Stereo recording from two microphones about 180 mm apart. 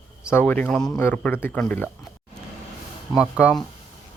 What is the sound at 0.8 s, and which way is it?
Speech, 15° left (ahead or behind).